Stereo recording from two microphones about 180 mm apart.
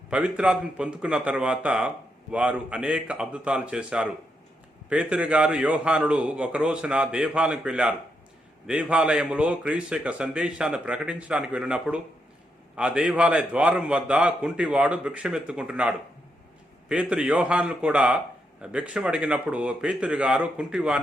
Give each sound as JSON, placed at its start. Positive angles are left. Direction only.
{"t": 0.1, "sound": "a man's voice", "side_deg": -5}